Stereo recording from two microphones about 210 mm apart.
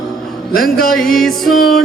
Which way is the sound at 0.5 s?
45° left (ahead or behind).